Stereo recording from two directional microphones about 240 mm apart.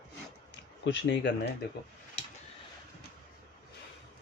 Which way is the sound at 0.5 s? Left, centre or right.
Left.